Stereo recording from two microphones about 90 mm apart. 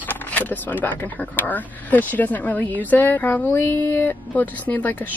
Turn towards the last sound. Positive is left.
turn(degrees=15)  # may be behind; listen again after turning